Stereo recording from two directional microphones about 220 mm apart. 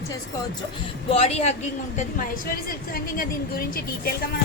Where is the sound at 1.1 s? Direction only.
30° left (ahead or behind).